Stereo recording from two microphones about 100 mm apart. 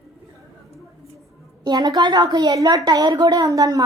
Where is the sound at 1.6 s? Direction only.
45° right (ahead or behind).